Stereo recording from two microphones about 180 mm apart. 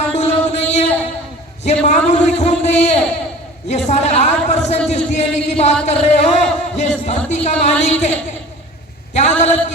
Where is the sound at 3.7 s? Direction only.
40° left (ahead or behind).